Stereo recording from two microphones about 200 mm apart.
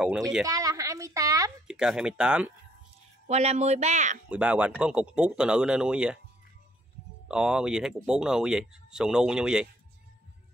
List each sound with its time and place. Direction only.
0.0 s speech: 5° right (ahead or behind)
0.5 s a sound: 15° right (ahead or behind)
1.7 s speech: 5° right (ahead or behind)
3.3 s speech: 35° right (ahead or behind)
4.3 s speech: 5° right (ahead or behind)
7.2 s speech: 5° right (ahead or behind)